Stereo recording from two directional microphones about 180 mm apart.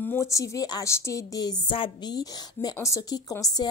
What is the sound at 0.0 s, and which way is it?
A woman's voice, 15° left (ahead or behind).